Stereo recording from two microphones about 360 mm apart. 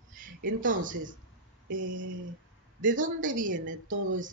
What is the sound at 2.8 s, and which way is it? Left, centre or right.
Speech, right.